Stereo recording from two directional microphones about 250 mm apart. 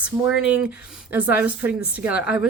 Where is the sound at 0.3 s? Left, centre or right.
Centre.